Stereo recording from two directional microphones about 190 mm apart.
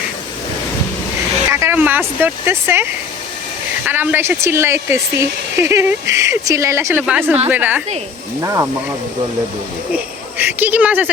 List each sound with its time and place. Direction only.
1.5 s speech: 15° right (ahead or behind)
9.9 s speech: 10° right (ahead or behind)